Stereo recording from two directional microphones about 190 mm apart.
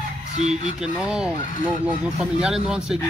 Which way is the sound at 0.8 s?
5° right (ahead or behind).